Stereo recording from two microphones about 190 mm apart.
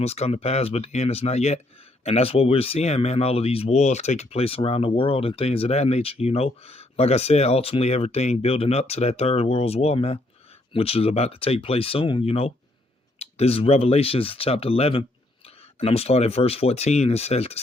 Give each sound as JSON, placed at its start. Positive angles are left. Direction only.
{"t": 0.0, "sound": "speech", "side_deg": 35}